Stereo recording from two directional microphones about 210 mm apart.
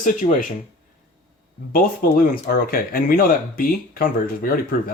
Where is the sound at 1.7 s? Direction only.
45° left (ahead or behind).